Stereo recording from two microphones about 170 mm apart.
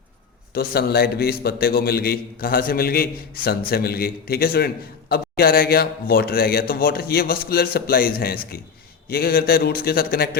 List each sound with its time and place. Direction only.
0.5 s a man's voice: 65° left (ahead or behind)